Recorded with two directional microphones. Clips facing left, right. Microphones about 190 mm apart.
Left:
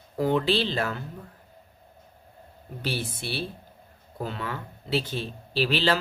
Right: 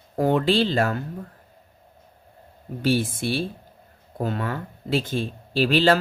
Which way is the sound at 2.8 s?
50° right (ahead or behind).